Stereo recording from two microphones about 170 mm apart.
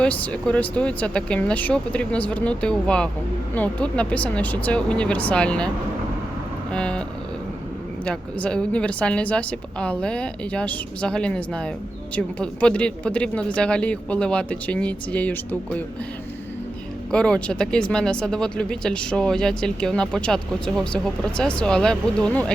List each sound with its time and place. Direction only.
0.0 s a woman's voice: 5° left (ahead or behind)
8.0 s a woman's voice: 5° left (ahead or behind)
17.1 s speech: 5° left (ahead or behind)